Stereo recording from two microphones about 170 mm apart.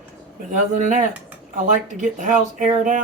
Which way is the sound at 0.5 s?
50° right (ahead or behind).